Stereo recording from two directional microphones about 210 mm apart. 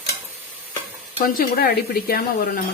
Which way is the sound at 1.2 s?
45° left (ahead or behind).